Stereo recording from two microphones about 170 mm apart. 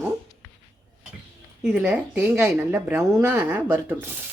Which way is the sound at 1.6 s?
5° right (ahead or behind).